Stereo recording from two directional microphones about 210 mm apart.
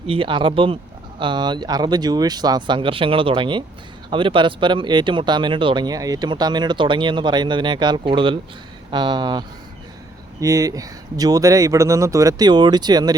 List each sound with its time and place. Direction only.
0.1 s speech: 25° right (ahead or behind)
10.4 s speech: 15° right (ahead or behind)